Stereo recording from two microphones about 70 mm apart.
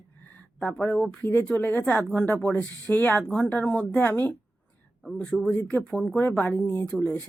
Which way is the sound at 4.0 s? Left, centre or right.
Left.